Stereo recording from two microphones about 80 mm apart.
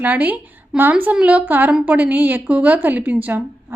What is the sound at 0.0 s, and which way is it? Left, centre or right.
A woman's voice, right.